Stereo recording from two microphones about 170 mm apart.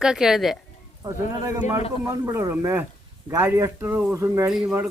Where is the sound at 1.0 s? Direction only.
20° right (ahead or behind).